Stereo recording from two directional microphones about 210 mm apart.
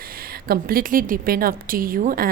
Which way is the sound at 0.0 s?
45° right (ahead or behind).